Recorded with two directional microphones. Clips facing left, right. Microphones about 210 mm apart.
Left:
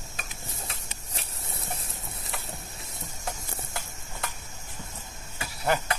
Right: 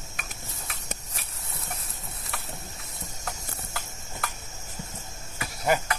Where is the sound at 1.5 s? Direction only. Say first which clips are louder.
Left 1 dB; 30° left (ahead or behind).